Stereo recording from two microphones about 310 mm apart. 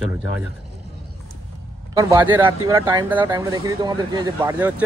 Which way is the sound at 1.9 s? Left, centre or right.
Centre.